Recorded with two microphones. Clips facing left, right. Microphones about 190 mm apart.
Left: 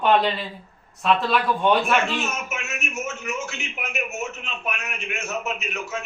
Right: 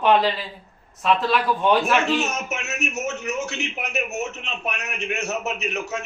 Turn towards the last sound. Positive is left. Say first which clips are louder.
# right 2 dB
turn(degrees=-40)  # may be behind; listen again after turning